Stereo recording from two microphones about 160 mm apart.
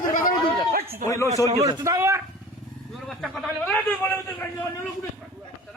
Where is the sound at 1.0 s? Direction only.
20° left (ahead or behind).